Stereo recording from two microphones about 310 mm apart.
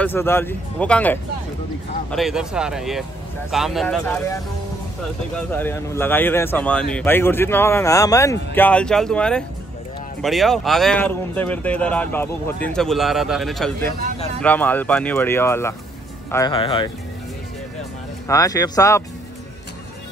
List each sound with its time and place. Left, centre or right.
0.0 s speech: centre
18.3 s speech: centre